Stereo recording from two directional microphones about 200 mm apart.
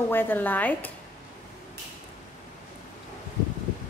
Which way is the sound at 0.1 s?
10° left (ahead or behind).